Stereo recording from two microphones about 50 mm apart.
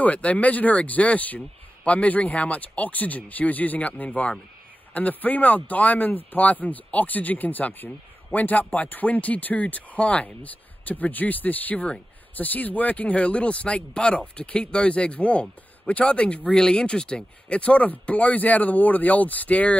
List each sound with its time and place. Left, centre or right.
0.0 s speech: left